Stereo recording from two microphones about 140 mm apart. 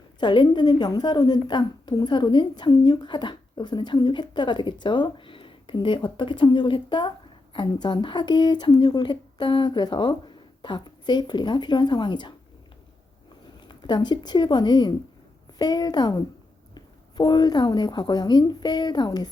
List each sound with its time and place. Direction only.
0.2 s a woman's voice: 35° left (ahead or behind)
13.7 s a woman's voice: 35° left (ahead or behind)